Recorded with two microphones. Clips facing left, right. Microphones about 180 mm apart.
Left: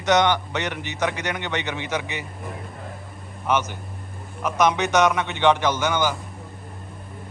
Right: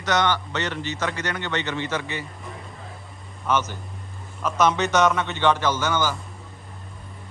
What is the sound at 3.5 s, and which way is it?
A man's voice, 15° left (ahead or behind).